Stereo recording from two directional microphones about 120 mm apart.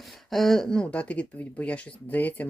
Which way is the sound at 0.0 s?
Centre (ahead or behind).